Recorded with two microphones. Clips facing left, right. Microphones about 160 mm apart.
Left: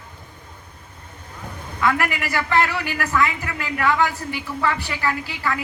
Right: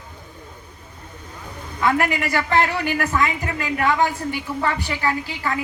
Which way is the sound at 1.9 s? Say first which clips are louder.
Right 3 dB; 25° right (ahead or behind).